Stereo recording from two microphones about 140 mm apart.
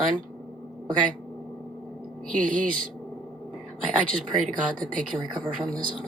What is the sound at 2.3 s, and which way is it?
Speech, 70° right (ahead or behind).